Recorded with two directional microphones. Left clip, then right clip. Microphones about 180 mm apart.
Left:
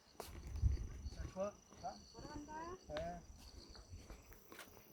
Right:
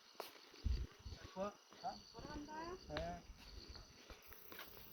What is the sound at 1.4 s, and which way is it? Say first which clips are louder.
Cricket: left 2 dB; 25° left (ahead or behind).